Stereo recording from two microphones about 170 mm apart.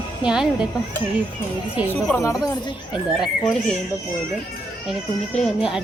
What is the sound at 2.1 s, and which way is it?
Speech, 20° left (ahead or behind).